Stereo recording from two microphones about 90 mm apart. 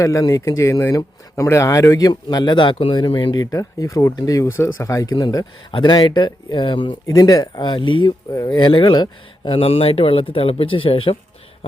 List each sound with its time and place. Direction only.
0.0 s speech: 40° left (ahead or behind); by 3.3 s 65° left (ahead or behind)
3.3 s speech: 40° left (ahead or behind)
5.7 s speech: 55° left (ahead or behind)
7.1 s speech: 45° left (ahead or behind); by 8.1 s 65° left (ahead or behind)
8.3 s speech: 50° left (ahead or behind); by 11.2 s 90° left